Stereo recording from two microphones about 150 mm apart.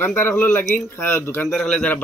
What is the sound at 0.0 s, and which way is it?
A man's voice, 15° left (ahead or behind).